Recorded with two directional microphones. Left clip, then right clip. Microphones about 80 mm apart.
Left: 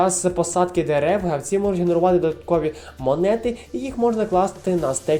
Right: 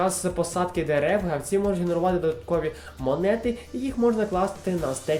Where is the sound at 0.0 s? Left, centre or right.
Left.